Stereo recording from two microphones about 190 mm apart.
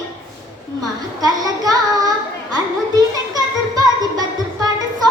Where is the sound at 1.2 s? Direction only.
20° right (ahead or behind).